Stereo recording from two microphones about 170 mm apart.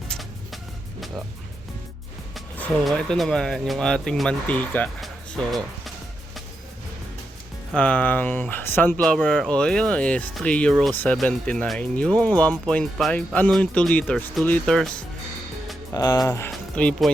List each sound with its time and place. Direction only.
0.1 s vehicle: centre (ahead or behind)
2.3 s speech: centre (ahead or behind)
7.7 s speech: 10° left (ahead or behind)
15.9 s speech: 20° left (ahead or behind)
16.5 s speech: 5° left (ahead or behind)